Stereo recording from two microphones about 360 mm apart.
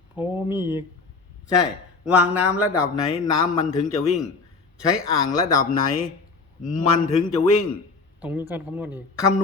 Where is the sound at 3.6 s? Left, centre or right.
Centre.